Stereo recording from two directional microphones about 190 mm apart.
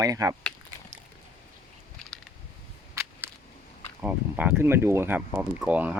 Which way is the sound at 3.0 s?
15° right (ahead or behind).